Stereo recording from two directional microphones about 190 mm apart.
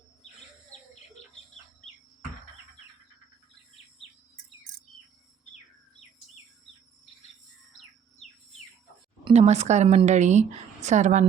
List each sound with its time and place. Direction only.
9.2 s a woman's voice: 35° right (ahead or behind)